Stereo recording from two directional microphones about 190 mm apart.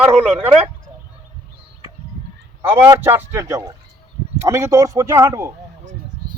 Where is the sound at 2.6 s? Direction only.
10° right (ahead or behind).